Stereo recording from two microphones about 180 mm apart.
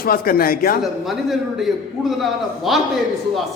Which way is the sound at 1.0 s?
Centre (ahead or behind).